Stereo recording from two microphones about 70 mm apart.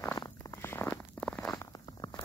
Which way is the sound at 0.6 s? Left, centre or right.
Left.